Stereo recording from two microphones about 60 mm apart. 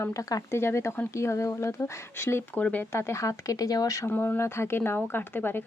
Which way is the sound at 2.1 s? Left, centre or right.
Left.